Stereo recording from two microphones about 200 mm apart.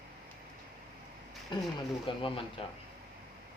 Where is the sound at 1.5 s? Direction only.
25° left (ahead or behind).